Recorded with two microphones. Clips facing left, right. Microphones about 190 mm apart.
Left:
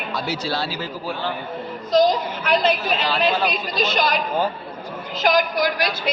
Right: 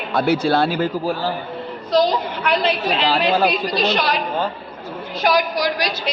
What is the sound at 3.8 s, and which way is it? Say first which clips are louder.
Speech: even; 60° right (ahead or behind).